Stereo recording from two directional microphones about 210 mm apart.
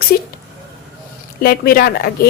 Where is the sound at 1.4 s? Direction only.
45° left (ahead or behind).